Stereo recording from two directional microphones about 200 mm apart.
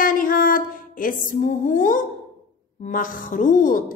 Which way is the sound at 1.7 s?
40° left (ahead or behind).